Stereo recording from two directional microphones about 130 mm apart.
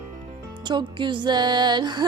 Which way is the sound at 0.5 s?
35° right (ahead or behind).